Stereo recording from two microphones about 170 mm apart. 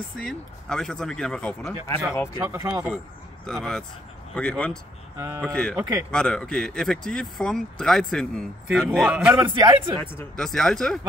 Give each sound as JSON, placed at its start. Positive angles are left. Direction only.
{"t": 0.2, "sound": "speech", "side_deg": 5}
{"t": 2.4, "sound": "a man's voice", "side_deg": -15}
{"t": 3.4, "sound": "speech", "side_deg": 5}
{"t": 5.8, "sound": "speech", "side_deg": -20}
{"t": 6.1, "sound": "a man's voice", "side_deg": 5}
{"t": 9.9, "sound": "speech", "side_deg": 5}